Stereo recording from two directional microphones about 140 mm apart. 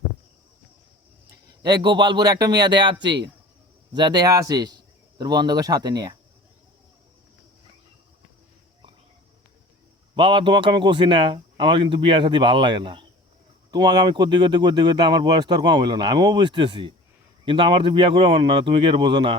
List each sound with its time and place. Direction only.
1.5 s speech: 30° right (ahead or behind)
10.2 s speech: 40° right (ahead or behind)